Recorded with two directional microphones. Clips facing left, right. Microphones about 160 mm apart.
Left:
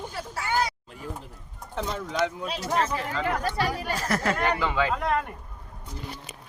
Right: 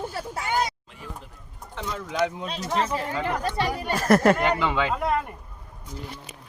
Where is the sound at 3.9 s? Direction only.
50° right (ahead or behind).